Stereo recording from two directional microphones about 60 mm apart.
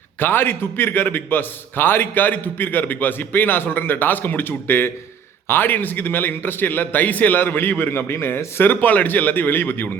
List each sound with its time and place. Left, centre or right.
0.2 s a man's voice: left